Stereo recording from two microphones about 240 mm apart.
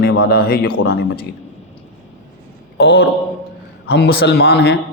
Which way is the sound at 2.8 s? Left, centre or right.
Left.